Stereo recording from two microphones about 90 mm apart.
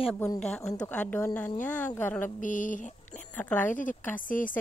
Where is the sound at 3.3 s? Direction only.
20° left (ahead or behind).